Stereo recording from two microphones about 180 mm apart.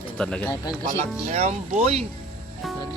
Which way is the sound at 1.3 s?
40° right (ahead or behind).